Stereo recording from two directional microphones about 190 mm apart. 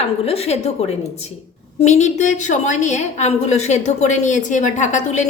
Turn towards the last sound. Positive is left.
turn(degrees=40)  # may be behind; listen again after turning